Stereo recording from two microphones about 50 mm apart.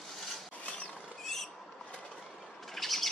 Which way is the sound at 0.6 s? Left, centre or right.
Left.